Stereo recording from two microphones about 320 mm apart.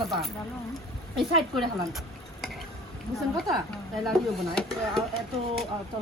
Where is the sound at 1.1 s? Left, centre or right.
Centre.